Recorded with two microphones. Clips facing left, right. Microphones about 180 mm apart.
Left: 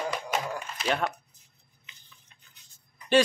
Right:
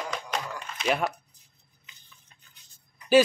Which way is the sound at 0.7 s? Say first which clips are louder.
Right 2 dB; 5° right (ahead or behind).